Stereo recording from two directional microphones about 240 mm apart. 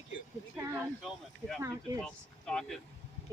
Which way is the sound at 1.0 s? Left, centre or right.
Centre.